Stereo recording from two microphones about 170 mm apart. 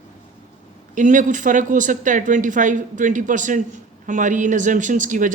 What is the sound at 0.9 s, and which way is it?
Speech, 45° right (ahead or behind).